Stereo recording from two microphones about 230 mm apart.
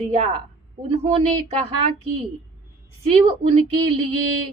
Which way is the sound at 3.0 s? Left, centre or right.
Right.